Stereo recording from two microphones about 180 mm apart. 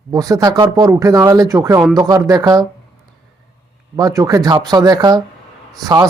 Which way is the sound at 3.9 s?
20° right (ahead or behind).